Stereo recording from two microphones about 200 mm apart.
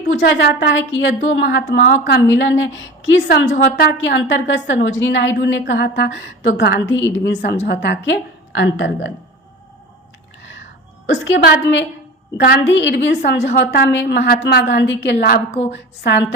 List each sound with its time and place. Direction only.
0.2 s a woman's voice: 55° left (ahead or behind)
1.8 s a woman's voice: 50° left (ahead or behind)
2.3 s a woman's voice: 70° left (ahead or behind)
6.6 s a woman's voice: 60° left (ahead or behind)
11.1 s a woman's voice: 65° left (ahead or behind)
12.4 s a woman's voice: 50° left (ahead or behind)